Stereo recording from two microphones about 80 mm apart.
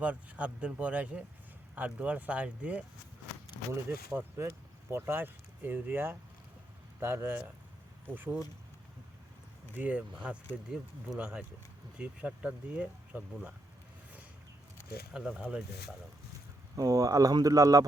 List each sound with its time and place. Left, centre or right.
0.0 s speech: centre
4.1 s speech: right
9.7 s speech: centre
15.1 s speech: centre
16.7 s speech: right